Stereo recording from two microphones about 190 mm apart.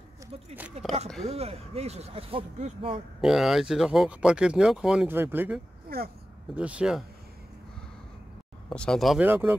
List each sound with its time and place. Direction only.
1.2 s speech: 35° right (ahead or behind)
3.2 s speech: centre (ahead or behind)
8.6 s speech: 5° left (ahead or behind)